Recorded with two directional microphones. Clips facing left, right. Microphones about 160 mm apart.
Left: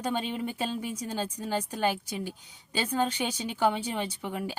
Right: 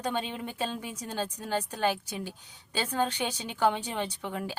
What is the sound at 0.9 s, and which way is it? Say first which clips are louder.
Speech: left 1 dB; 10° left (ahead or behind).